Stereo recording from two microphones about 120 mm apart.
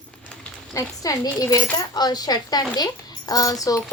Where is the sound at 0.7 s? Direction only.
30° left (ahead or behind).